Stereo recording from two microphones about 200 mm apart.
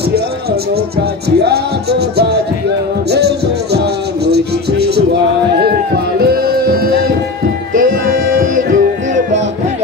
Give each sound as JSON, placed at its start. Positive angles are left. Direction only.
{"t": 0.1, "sound": "speech", "side_deg": -50}
{"t": 3.1, "sound": "music", "side_deg": -55}